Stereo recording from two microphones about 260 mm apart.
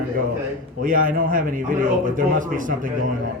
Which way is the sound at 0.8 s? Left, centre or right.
Right.